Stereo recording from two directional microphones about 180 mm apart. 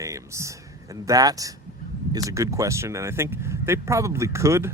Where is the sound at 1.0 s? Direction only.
20° right (ahead or behind).